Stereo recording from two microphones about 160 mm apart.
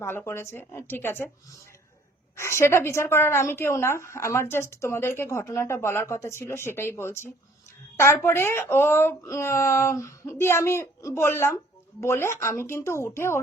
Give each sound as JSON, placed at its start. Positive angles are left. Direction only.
{"t": 0.0, "sound": "a woman's voice", "side_deg": 15}
{"t": 2.3, "sound": "a woman's voice", "side_deg": 15}